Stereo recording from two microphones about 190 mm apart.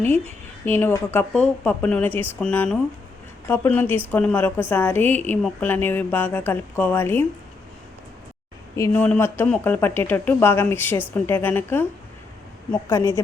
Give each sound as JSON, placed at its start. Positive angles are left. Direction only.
{"t": 0.6, "sound": "a woman's voice", "side_deg": 10}
{"t": 8.7, "sound": "a woman's voice", "side_deg": 10}
{"t": 12.9, "sound": "a woman's voice", "side_deg": 15}